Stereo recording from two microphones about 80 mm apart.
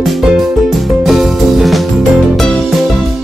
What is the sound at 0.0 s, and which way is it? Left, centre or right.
Music, centre.